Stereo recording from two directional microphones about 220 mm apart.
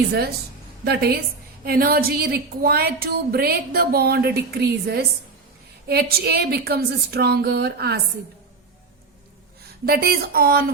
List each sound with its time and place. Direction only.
0.9 s a woman's voice: 45° right (ahead or behind)
9.8 s a woman's voice: 45° right (ahead or behind)